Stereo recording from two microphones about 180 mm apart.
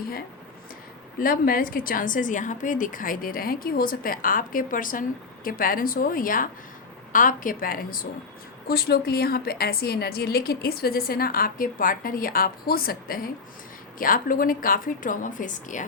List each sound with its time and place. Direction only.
1.2 s a woman's voice: 50° left (ahead or behind)